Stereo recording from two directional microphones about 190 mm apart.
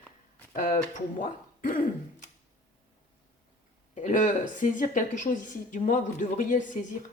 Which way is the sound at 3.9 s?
40° left (ahead or behind).